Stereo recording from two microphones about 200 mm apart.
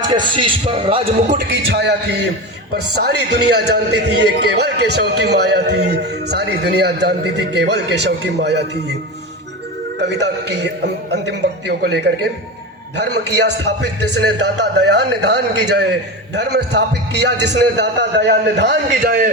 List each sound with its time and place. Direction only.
0.1 s speech: 25° right (ahead or behind)
1.5 s a man's voice: 55° right (ahead or behind)
10.0 s a man's voice: 60° right (ahead or behind)